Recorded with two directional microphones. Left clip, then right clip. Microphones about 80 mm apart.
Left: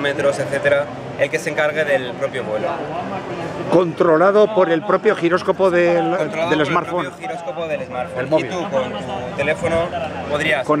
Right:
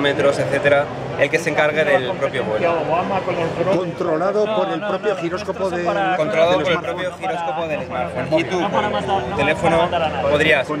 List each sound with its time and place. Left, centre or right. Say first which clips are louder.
0.0 s a man's voice: right 1 dB; centre
3.7 s a man's voice: left 6 dB; left
6.1 s a man's voice: right 3 dB; centre
8.3 s a man's voice: even; centre